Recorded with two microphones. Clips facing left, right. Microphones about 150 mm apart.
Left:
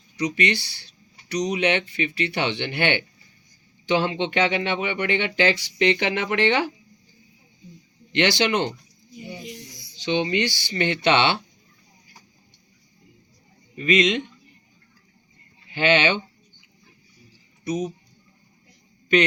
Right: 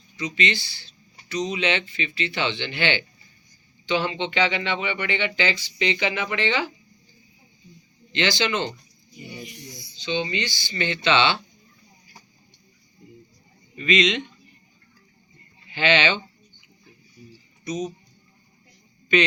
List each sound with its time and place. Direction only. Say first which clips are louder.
0.2 s speech: left 3 dB; 70° left (ahead or behind)
1.5 s speech: left 4 dB; 60° left (ahead or behind)
3.8 s speech: left 2 dB; 70° left (ahead or behind)
8.1 s speech: left 3 dB; 65° left (ahead or behind)
10.0 s speech: left 4 dB; 65° left (ahead or behind)
13.7 s speech: left 2 dB; 50° left (ahead or behind)
15.7 s speech: left 2 dB; 50° left (ahead or behind)